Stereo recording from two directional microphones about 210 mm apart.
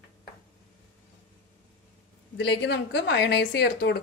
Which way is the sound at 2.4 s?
55° left (ahead or behind).